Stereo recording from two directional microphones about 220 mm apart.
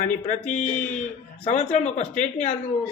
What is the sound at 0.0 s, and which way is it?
Speech, 35° left (ahead or behind).